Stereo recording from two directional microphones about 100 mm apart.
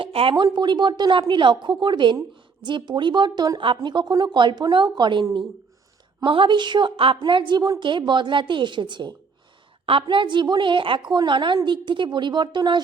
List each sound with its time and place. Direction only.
0.0 s a sound: 65° right (ahead or behind)
0.3 s a woman's voice: 50° right (ahead or behind)
3.6 s a woman's voice: 55° right (ahead or behind)
6.2 s a woman's voice: 55° right (ahead or behind)